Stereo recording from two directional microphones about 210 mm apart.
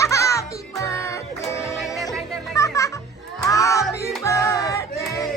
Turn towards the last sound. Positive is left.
turn(degrees=15)  # may be behind; listen again after turning